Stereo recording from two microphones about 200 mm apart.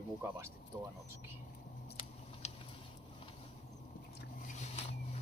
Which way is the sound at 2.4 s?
35° left (ahead or behind).